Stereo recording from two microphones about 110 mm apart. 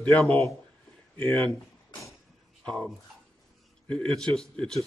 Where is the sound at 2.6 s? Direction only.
5° left (ahead or behind).